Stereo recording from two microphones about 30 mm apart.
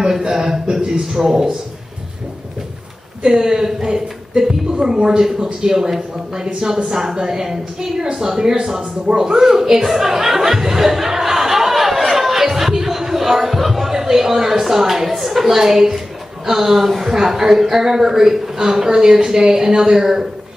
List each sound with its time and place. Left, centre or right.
0.4 s a woman's voice: centre
3.2 s a man's voice: right
9.8 s music: centre
15.0 s a woman's voice: centre